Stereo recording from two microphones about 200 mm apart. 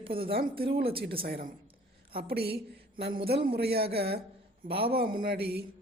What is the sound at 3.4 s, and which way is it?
Speech, 50° right (ahead or behind).